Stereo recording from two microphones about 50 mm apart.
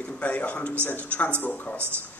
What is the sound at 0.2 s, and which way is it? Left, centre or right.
A man's voice, left.